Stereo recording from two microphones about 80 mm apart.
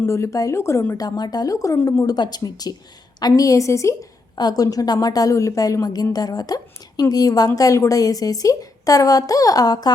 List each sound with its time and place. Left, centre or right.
0.1 s a woman's voice: left
0.9 s a woman's voice: left
2.0 s a woman's voice: left
4.4 s a woman's voice: left